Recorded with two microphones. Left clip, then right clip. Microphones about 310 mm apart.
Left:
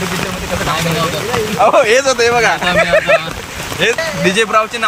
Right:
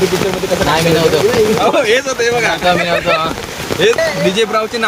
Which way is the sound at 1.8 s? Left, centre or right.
Centre.